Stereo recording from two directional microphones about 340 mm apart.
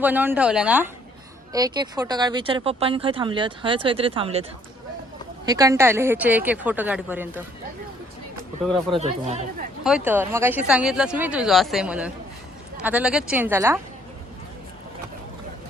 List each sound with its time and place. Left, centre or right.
0.0 s speech: centre
5.5 s speech: centre
9.0 s speech: centre
9.8 s speech: centre